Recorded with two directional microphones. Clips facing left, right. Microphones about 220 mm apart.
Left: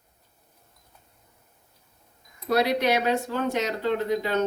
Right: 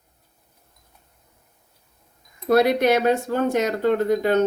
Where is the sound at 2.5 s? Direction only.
50° right (ahead or behind).